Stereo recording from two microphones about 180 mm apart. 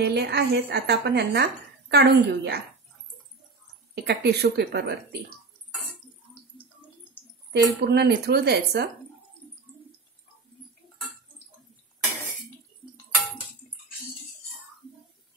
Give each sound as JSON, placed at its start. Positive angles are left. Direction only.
{"t": 0.0, "sound": "speech", "side_deg": -65}
{"t": 3.9, "sound": "speech", "side_deg": -65}
{"t": 7.5, "sound": "speech", "side_deg": -65}